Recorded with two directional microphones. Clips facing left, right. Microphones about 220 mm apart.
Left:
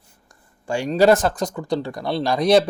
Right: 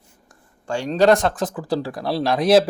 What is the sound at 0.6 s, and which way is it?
Speech, 10° left (ahead or behind).